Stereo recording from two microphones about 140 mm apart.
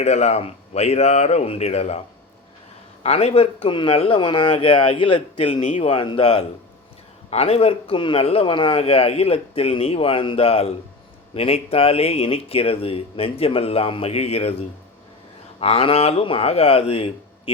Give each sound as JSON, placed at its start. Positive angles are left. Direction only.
{"t": 0.0, "sound": "a man's voice", "side_deg": 50}
{"t": 3.0, "sound": "a man's voice", "side_deg": 50}
{"t": 15.6, "sound": "a man's voice", "side_deg": 45}